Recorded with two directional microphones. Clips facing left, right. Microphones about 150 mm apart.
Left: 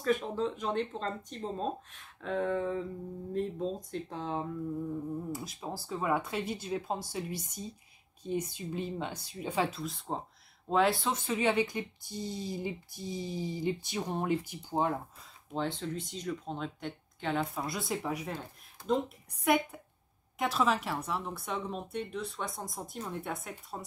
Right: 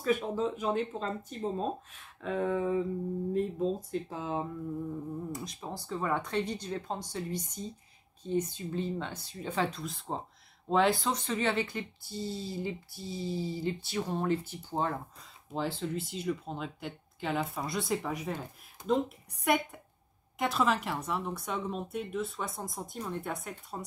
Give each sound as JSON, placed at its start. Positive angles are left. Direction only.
{"t": 0.0, "sound": "speech", "side_deg": -5}
{"t": 15.5, "sound": "speech", "side_deg": -5}